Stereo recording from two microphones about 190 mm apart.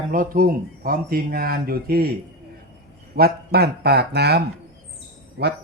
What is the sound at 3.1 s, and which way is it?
Speech, 55° right (ahead or behind).